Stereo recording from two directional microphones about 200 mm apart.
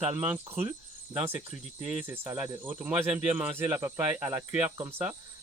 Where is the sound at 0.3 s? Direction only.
10° right (ahead or behind).